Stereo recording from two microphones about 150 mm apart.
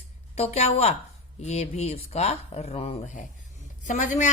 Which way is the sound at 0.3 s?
45° left (ahead or behind).